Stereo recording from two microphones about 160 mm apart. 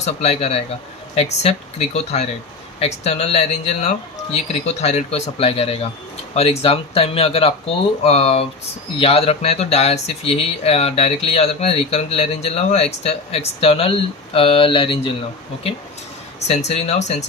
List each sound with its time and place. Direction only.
0.0 s speech: 40° left (ahead or behind)
16.5 s speech: 40° left (ahead or behind)